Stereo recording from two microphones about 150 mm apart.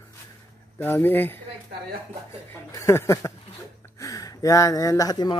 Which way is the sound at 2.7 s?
20° left (ahead or behind).